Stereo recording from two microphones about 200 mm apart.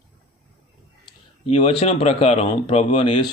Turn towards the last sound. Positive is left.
turn(degrees=30)  # may be behind; listen again after turning